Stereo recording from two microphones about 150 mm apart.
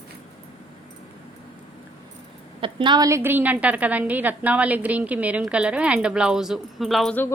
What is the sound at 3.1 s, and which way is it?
A woman's voice, 15° right (ahead or behind).